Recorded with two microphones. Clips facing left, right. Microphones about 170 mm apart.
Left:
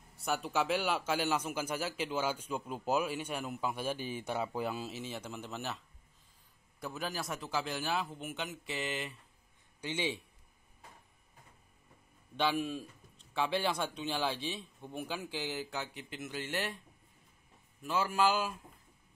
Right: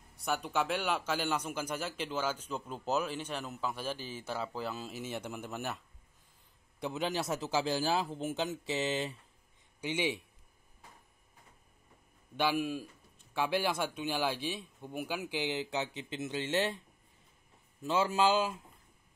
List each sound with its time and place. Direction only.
0.2 s a man's voice: centre (ahead or behind)
5.0 s a man's voice: 10° right (ahead or behind)
6.8 s a man's voice: 20° right (ahead or behind)
9.8 s a man's voice: 10° right (ahead or behind)
12.4 s a man's voice: 10° right (ahead or behind)
15.2 s a man's voice: 15° right (ahead or behind)
17.8 s a man's voice: 25° right (ahead or behind)